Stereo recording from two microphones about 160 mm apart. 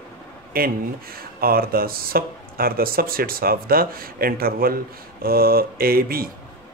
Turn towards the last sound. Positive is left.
turn(degrees=-70)  # may be behind; listen again after turning